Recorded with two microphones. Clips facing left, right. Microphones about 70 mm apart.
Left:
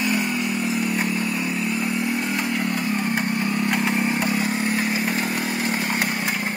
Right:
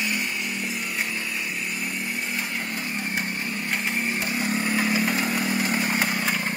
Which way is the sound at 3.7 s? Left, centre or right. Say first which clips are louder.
Left 2 dB; left.